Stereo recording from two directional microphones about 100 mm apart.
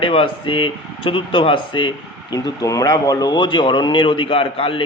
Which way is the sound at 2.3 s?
40° left (ahead or behind).